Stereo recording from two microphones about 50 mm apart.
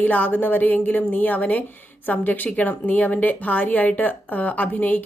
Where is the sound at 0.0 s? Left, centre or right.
Left.